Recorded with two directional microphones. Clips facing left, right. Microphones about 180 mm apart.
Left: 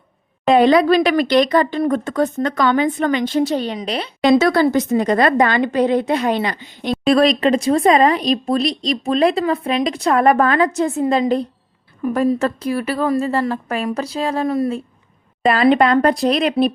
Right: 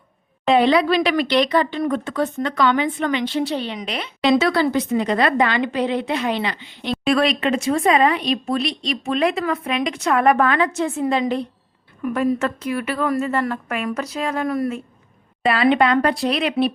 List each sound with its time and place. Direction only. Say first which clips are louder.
0.4 s a woman's voice: left 4 dB; 45° left (ahead or behind); by 14.8 s 25° left (ahead or behind)
15.4 s a woman's voice: left 3 dB; 40° left (ahead or behind)